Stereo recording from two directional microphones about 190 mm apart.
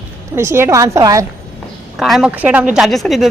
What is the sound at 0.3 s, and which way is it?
Speech, 15° right (ahead or behind).